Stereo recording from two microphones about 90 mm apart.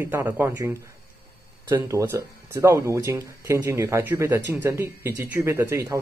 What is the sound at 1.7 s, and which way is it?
Speech, 35° right (ahead or behind).